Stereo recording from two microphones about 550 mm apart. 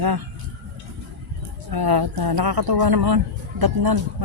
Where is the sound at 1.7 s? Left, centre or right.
Right.